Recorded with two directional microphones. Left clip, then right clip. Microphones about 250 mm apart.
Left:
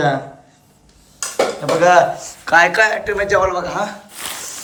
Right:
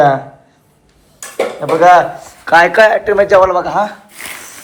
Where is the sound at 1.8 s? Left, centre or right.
Centre.